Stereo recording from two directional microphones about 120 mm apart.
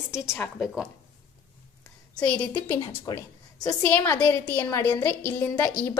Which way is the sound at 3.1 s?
30° left (ahead or behind).